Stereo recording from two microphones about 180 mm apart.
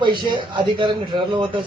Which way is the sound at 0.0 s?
25° right (ahead or behind).